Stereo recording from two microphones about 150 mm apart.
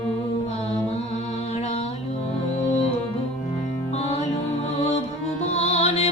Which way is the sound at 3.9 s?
45° left (ahead or behind).